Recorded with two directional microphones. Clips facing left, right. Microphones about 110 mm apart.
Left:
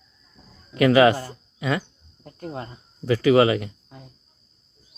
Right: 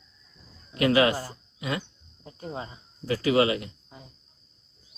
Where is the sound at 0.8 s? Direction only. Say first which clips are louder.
Left 6 dB; 90° left.